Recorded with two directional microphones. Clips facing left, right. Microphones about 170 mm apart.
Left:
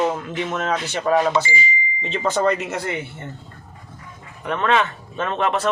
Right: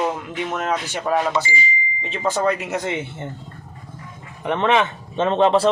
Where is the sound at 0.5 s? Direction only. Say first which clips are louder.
Even; 10° right (ahead or behind).